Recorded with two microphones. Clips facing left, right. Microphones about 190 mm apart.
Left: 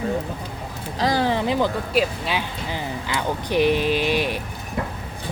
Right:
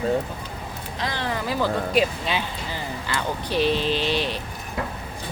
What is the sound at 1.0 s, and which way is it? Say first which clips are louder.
Speech: left 7 dB; 30° left (ahead or behind).